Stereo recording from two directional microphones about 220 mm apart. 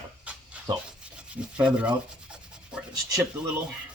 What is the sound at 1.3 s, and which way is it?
Rub, 5° right (ahead or behind).